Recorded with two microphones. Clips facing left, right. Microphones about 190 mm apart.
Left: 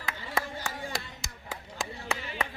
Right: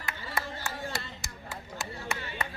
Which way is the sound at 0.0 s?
90° left.